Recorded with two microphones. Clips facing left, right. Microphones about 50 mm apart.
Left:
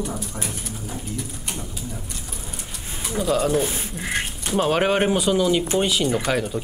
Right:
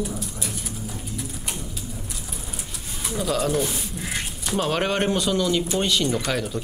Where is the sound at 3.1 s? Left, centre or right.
Centre.